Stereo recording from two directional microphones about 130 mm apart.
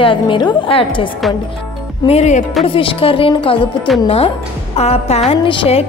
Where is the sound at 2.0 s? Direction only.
55° left (ahead or behind).